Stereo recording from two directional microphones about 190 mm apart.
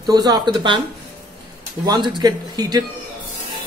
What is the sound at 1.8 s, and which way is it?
A man's voice, 20° right (ahead or behind).